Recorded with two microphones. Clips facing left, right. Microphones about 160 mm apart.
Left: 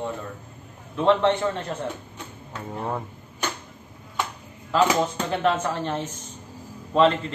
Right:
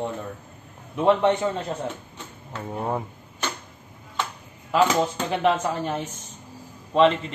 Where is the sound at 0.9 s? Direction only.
15° right (ahead or behind).